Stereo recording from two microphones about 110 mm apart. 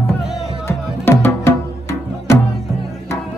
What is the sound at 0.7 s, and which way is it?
Music, 25° left (ahead or behind).